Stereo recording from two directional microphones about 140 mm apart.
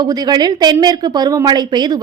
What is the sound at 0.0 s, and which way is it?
A woman's voice, 30° right (ahead or behind).